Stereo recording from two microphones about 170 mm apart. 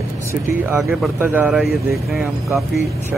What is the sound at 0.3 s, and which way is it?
Speech, 15° right (ahead or behind).